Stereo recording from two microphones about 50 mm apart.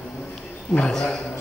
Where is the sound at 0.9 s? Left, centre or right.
Centre.